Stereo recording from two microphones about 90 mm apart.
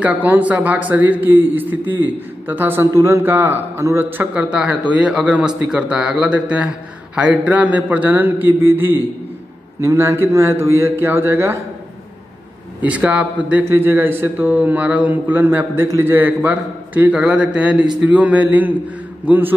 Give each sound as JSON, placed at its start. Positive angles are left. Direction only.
{"t": 0.0, "sound": "a man's voice", "side_deg": -15}
{"t": 4.3, "sound": "a man's voice", "side_deg": -10}
{"t": 12.8, "sound": "a man's voice", "side_deg": -15}